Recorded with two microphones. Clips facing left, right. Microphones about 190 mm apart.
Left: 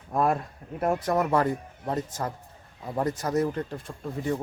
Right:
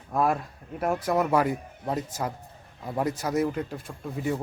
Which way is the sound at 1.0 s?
5° right (ahead or behind).